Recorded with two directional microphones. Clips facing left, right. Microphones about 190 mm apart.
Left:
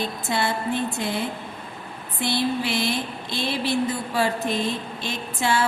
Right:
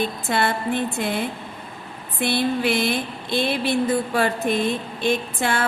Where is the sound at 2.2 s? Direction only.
55° right (ahead or behind).